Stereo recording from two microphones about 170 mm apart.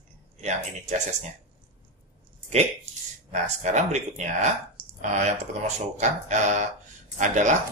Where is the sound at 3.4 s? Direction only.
45° right (ahead or behind).